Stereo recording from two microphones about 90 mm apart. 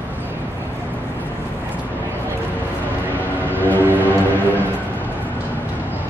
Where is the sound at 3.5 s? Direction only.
20° left (ahead or behind).